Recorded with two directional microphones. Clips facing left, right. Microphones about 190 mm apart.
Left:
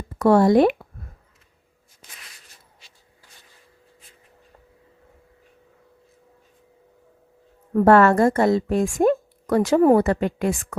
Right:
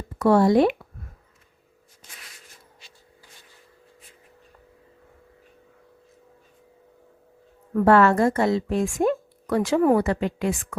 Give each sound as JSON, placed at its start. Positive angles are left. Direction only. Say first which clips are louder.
{"t": 0.2, "sound": "a woman's voice", "louder": "left 2 dB", "side_deg": 45}
{"t": 7.9, "sound": "a woman's voice", "louder": "left 2 dB", "side_deg": 50}